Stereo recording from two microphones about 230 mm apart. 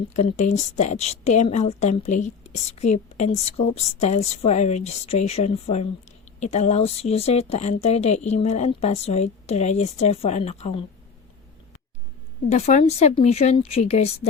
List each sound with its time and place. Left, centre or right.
0.1 s a woman's voice: left
12.5 s a woman's voice: left